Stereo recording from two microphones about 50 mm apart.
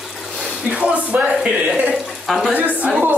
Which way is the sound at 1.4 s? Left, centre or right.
Right.